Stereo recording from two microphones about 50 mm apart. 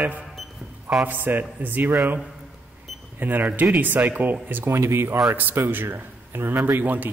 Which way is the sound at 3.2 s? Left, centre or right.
Right.